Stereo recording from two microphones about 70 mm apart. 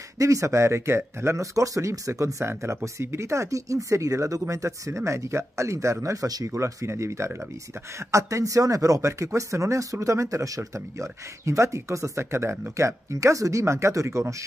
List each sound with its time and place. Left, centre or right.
0.2 s speech: right
6.0 s speech: right
6.5 s speech: right